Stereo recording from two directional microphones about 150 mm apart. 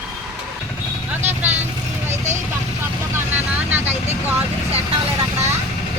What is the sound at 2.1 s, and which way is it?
Vehicle, 50° right (ahead or behind).